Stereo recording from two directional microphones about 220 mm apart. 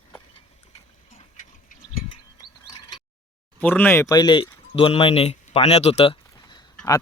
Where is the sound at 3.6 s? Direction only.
5° left (ahead or behind).